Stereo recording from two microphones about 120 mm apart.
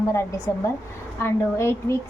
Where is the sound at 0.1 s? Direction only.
25° left (ahead or behind).